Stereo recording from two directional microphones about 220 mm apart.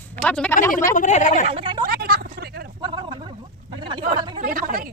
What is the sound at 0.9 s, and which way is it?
Speech, 35° left (ahead or behind).